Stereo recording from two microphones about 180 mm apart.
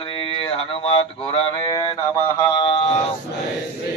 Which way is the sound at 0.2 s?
30° left (ahead or behind).